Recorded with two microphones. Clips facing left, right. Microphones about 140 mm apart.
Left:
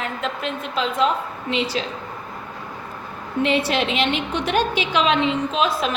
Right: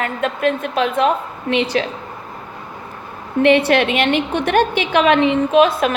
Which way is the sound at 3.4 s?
60° right (ahead or behind).